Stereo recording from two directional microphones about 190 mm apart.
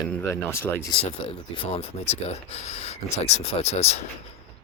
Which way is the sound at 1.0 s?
30° left (ahead or behind).